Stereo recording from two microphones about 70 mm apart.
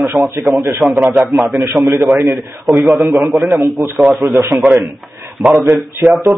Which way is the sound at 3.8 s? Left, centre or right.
Right.